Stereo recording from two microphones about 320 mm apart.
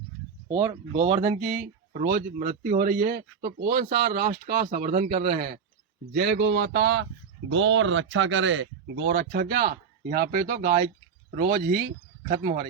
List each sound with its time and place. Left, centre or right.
0.4 s speech: centre